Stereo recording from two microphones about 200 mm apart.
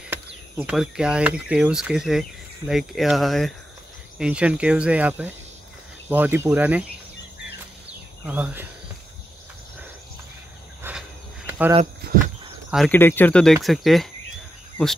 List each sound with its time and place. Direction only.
0.1 s speech: 5° right (ahead or behind)
8.3 s speech: 10° right (ahead or behind)
10.8 s cricket: 10° right (ahead or behind)
11.8 s speech: 45° right (ahead or behind)
12.9 s speech: 10° left (ahead or behind)